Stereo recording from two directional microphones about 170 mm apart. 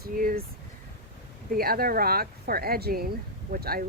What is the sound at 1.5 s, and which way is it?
Speech, 60° right (ahead or behind).